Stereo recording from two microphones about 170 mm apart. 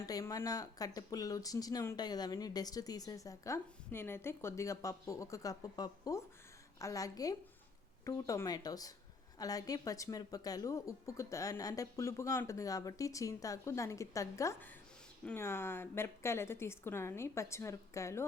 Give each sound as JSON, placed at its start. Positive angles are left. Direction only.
{"t": 0.0, "sound": "a woman's voice", "side_deg": 20}